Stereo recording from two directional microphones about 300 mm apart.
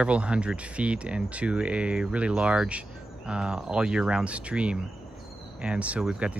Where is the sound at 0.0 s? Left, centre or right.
Centre.